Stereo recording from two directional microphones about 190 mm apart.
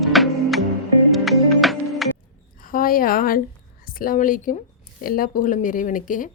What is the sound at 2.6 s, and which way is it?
A woman's voice, 50° left (ahead or behind).